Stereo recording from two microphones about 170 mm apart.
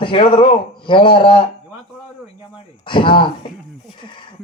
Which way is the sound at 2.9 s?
30° left (ahead or behind).